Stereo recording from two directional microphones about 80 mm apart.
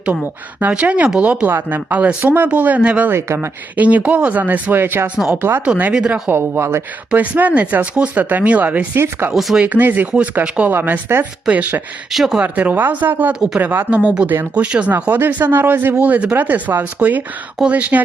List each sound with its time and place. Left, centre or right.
0.6 s speech: centre
3.1 s speech: right
3.8 s speech: centre
5.0 s speech: centre
5.4 s speech: right
5.6 s speech: centre
6.2 s speech: right
6.6 s speech: right
7.1 s speech: centre
9.3 s speech: centre
9.6 s speech: right
12.1 s speech: centre
12.4 s speech: right